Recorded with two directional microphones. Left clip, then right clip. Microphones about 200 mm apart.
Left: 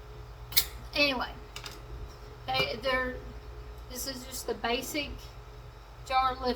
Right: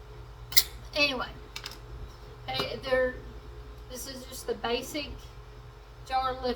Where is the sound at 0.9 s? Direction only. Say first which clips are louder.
Even; 15° left (ahead or behind).